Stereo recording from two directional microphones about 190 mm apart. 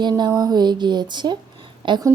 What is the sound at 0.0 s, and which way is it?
A woman's voice, 20° right (ahead or behind).